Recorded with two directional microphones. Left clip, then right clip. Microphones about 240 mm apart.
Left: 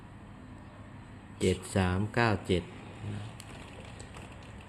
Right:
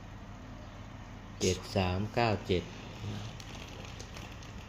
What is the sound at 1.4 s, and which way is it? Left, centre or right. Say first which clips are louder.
Speech: left 1 dB; left.